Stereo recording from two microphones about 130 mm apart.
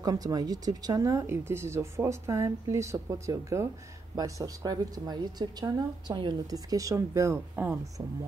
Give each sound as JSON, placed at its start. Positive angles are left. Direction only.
{"t": 0.0, "sound": "a woman's voice", "side_deg": -30}